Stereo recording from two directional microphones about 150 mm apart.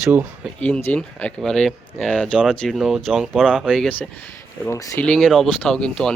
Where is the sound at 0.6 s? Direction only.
15° left (ahead or behind).